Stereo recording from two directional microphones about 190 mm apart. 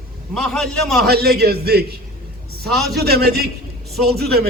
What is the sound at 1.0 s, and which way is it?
Speech, 55° right (ahead or behind).